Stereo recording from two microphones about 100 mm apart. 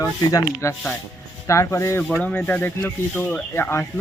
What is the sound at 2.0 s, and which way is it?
Speech, 15° left (ahead or behind).